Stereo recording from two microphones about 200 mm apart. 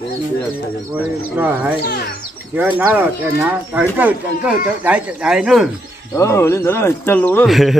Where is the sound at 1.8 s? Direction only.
50° left (ahead or behind).